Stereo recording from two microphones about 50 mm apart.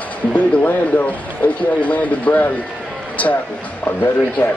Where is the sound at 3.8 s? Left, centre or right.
Left.